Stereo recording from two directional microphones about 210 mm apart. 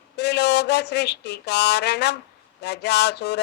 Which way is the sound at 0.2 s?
55° left (ahead or behind).